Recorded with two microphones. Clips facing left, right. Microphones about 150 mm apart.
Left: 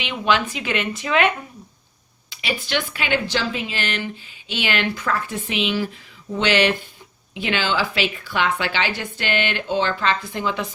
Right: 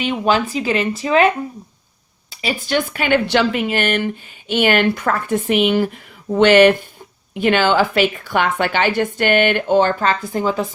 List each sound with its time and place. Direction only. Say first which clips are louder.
0.0 s speech: right 4 dB; 40° right (ahead or behind)
2.3 s speech: right 5 dB; 40° right (ahead or behind)